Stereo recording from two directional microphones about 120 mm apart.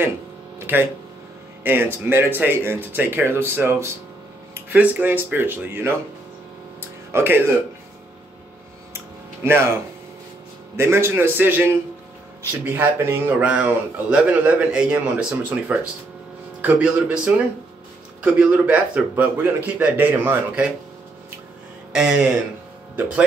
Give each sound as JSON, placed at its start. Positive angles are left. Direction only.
{"t": 0.6, "sound": "a sound", "side_deg": -20}
{"t": 1.6, "sound": "a man's voice", "side_deg": -15}
{"t": 6.8, "sound": "music", "side_deg": -20}
{"t": 8.9, "sound": "a sound", "side_deg": -20}
{"t": 10.8, "sound": "a man's voice", "side_deg": -20}
{"t": 21.9, "sound": "a man's voice", "side_deg": -10}